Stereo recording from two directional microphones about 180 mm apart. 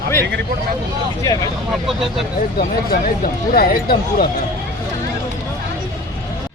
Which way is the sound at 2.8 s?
55° left (ahead or behind).